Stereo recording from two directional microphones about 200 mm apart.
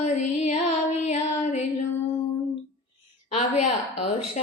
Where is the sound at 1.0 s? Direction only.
35° left (ahead or behind).